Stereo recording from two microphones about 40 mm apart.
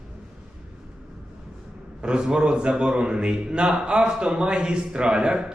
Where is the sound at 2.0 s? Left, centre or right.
Right.